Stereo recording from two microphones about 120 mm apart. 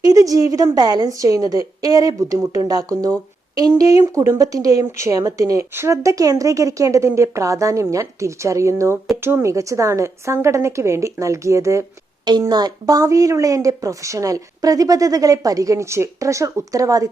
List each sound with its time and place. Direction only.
0.0 s a woman's voice: 30° right (ahead or behind)